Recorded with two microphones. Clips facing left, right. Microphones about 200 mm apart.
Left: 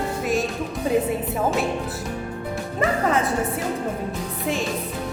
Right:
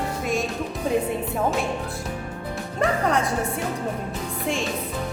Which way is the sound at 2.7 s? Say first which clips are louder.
Left 1 dB; centre (ahead or behind).